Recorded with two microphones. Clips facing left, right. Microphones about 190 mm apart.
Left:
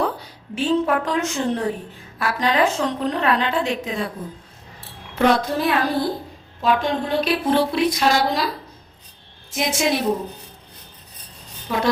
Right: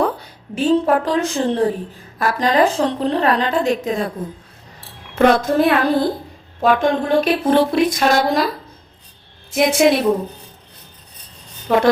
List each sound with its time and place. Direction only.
0.0 s a woman's voice: 45° right (ahead or behind); by 1.7 s 30° right (ahead or behind)
2.1 s a woman's voice: 40° right (ahead or behind)
5.1 s a woman's voice: 50° right (ahead or behind)
9.6 s a woman's voice: 60° right (ahead or behind)
11.7 s a woman's voice: 55° right (ahead or behind)